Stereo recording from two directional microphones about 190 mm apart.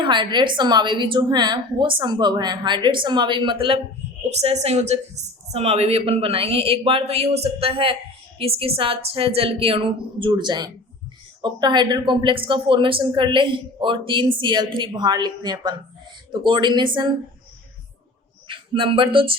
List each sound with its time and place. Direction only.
0.0 s a woman's voice: 25° right (ahead or behind)
18.4 s a man's voice: 25° right (ahead or behind)